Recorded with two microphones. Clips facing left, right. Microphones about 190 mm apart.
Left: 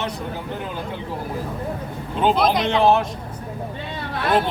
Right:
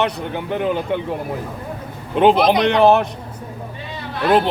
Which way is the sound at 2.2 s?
65° right (ahead or behind).